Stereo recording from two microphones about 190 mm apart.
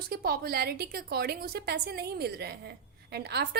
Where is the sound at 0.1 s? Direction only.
55° right (ahead or behind).